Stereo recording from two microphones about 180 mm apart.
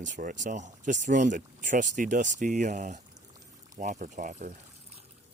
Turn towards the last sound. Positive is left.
turn(degrees=-40)  # may be behind; listen again after turning